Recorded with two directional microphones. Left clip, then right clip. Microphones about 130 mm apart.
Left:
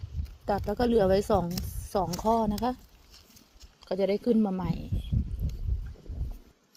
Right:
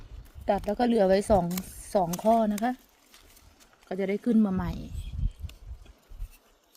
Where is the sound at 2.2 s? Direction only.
65° right (ahead or behind).